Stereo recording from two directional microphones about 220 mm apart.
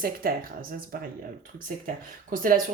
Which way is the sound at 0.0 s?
40° right (ahead or behind).